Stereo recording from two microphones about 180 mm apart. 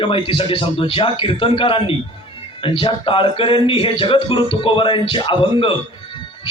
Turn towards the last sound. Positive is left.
turn(degrees=30)  # may be behind; listen again after turning